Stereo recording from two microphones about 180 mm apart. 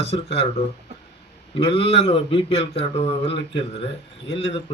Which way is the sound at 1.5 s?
30° left (ahead or behind).